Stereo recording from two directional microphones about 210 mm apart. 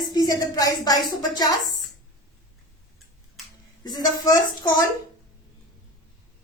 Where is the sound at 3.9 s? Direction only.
20° left (ahead or behind).